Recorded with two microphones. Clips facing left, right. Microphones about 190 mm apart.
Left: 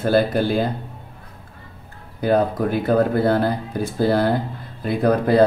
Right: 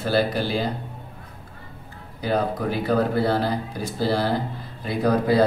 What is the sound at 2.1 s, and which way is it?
Speech, 55° left (ahead or behind).